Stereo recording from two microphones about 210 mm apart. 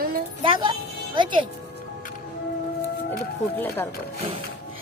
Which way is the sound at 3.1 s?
10° left (ahead or behind).